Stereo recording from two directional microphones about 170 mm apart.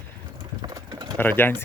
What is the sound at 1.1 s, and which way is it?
Speech, 10° left (ahead or behind).